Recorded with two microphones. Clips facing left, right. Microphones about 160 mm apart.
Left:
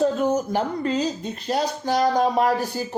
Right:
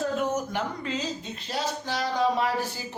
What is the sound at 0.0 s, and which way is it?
A woman's voice, 35° left (ahead or behind).